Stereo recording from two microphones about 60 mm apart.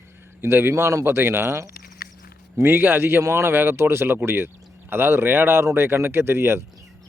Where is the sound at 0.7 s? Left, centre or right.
Right.